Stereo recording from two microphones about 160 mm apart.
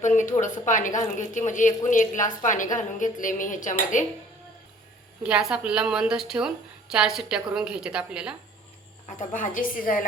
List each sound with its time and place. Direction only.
0.0 s speech: 50° left (ahead or behind)
5.2 s a woman's voice: 5° right (ahead or behind)
9.0 s a woman's voice: 50° left (ahead or behind)